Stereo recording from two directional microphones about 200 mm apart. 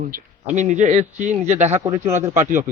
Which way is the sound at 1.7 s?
15° right (ahead or behind).